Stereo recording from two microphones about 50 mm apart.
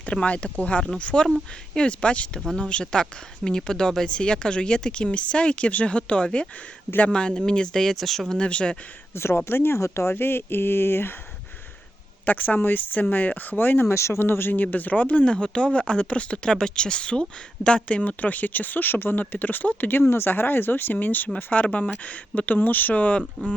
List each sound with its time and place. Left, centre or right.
0.0 s speech: left; by 8.4 s centre
8.4 s speech: centre
9.1 s speech: left
12.2 s speech: left
13.9 s speech: left
14.2 s speech: left
20.1 s speech: left